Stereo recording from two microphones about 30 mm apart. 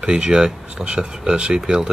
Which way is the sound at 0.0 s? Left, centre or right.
Right.